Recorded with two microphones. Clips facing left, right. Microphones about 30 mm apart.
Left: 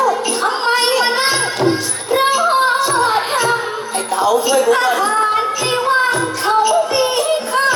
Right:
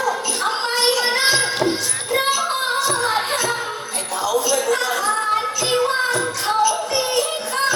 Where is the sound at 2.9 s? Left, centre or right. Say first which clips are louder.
Left 5 dB; left.